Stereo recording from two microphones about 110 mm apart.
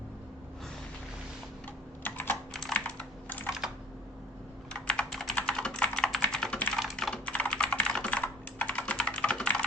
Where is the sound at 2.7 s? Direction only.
15° left (ahead or behind).